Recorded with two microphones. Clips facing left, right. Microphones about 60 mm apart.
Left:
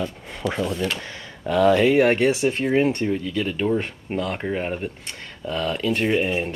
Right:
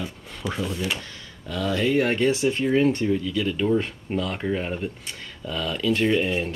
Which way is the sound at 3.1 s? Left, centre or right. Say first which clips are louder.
Even; left.